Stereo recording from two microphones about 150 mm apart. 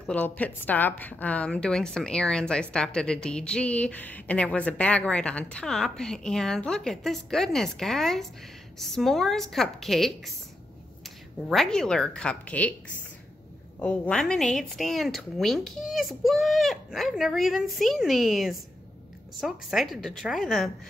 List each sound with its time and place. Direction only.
0.0 s a woman's voice: 10° left (ahead or behind)
11.4 s a woman's voice: 5° left (ahead or behind)
13.7 s a woman's voice: 10° left (ahead or behind)